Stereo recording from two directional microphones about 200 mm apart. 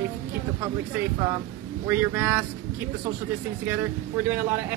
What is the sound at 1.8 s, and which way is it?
Speech, 10° right (ahead or behind).